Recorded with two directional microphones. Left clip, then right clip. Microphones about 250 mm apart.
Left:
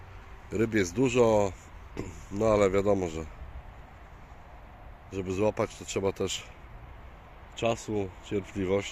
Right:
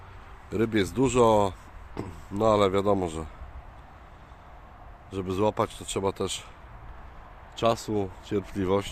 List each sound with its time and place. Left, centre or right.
0.5 s speech: centre
5.1 s speech: centre
7.5 s speech: centre